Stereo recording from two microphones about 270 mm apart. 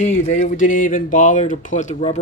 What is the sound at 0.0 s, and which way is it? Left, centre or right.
Speech, left.